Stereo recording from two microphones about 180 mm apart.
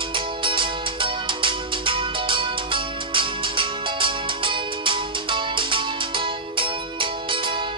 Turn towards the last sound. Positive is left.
turn(degrees=-30)  # may be behind; listen again after turning